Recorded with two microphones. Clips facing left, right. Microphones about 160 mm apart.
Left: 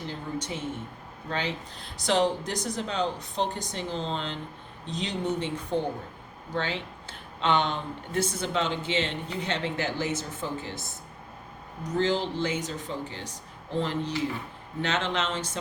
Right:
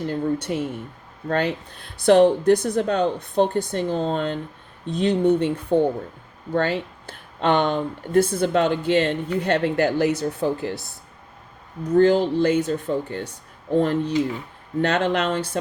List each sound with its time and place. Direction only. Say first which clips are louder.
0.0 s speech: right 10 dB; 55° right (ahead or behind)
11.8 s speech: right 10 dB; 55° right (ahead or behind)